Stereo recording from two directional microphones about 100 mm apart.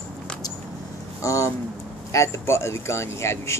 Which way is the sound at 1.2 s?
30° left (ahead or behind).